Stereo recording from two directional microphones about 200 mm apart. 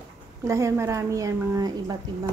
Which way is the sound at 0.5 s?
15° right (ahead or behind).